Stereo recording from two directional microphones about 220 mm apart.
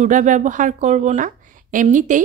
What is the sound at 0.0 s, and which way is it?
Speech, 35° right (ahead or behind).